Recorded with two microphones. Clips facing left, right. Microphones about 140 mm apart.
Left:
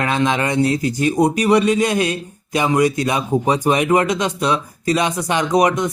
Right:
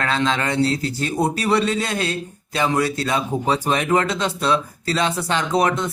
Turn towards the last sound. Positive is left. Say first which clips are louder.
# left 4 dB
turn(degrees=15)  # may be behind; listen again after turning